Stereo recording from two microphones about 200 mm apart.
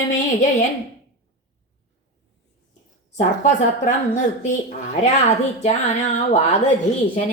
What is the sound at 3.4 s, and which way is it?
A woman's voice, 35° left (ahead or behind).